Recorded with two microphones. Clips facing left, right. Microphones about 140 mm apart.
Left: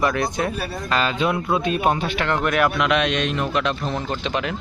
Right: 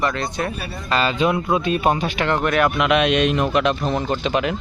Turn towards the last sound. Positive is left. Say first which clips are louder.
# right 4 dB
turn(degrees=-10)  # may be behind; listen again after turning